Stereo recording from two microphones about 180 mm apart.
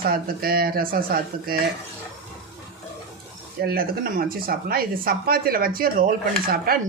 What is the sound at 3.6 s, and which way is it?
Speech, 55° right (ahead or behind).